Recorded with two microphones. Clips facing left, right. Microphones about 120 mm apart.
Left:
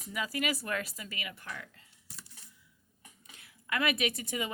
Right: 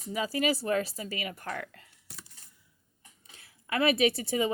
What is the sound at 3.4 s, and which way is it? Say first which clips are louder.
A woman's voice: right 5 dB; 30° right (ahead or behind).